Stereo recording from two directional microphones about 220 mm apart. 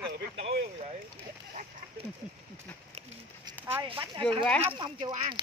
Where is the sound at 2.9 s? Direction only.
30° right (ahead or behind).